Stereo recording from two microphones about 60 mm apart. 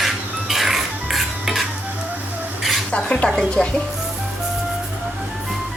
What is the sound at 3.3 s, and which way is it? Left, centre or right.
Music, centre.